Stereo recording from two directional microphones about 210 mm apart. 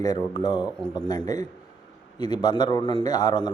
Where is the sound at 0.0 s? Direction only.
15° left (ahead or behind).